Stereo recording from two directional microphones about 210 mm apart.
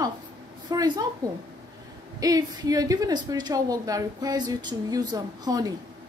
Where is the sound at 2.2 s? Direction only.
15° right (ahead or behind).